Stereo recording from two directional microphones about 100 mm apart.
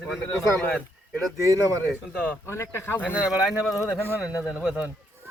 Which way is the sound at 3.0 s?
10° right (ahead or behind).